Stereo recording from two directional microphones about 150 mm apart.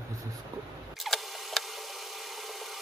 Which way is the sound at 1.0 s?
Centre (ahead or behind).